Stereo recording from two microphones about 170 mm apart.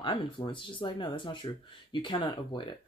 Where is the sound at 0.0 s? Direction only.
30° left (ahead or behind).